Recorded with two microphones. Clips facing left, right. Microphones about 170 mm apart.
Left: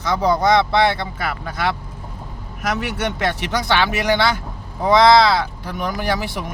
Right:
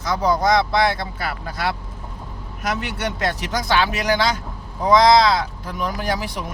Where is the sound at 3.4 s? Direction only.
65° left (ahead or behind).